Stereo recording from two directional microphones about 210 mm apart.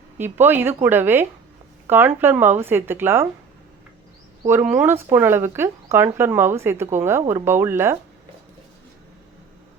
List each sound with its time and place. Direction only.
0.2 s speech: 10° right (ahead or behind)
4.4 s speech: 10° right (ahead or behind)